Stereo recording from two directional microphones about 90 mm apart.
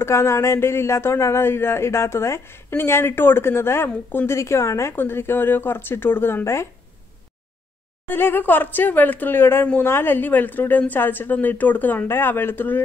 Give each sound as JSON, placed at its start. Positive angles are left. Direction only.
{"t": 0.0, "sound": "a woman's voice", "side_deg": 30}
{"t": 8.1, "sound": "a woman's voice", "side_deg": 25}